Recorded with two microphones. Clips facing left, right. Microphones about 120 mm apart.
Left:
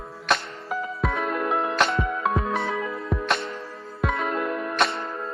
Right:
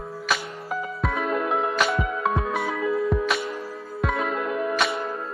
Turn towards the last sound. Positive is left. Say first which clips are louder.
# right 1 dB
turn(degrees=0)  # may be behind; listen again after turning